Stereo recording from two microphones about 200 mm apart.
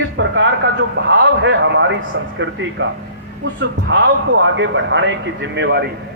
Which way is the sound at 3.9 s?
70° right (ahead or behind).